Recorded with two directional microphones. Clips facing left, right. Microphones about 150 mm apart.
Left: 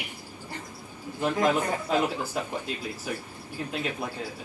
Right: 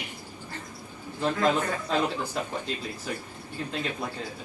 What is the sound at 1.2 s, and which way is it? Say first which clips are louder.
Speech: even; 15° left (ahead or behind).